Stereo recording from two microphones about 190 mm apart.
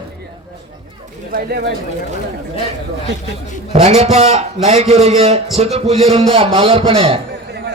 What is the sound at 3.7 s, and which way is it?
A man's voice, 35° right (ahead or behind).